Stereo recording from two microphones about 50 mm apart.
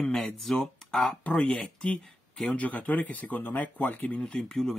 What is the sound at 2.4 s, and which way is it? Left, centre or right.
Speech, left.